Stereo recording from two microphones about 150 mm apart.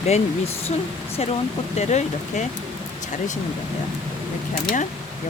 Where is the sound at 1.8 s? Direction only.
50° left (ahead or behind).